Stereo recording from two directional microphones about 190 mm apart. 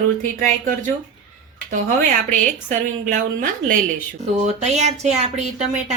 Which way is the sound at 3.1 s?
45° right (ahead or behind).